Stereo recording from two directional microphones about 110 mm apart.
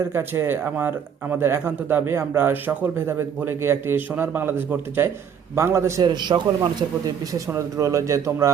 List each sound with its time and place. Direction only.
0.0 s speech: 20° right (ahead or behind)
6.0 s speech: 40° right (ahead or behind)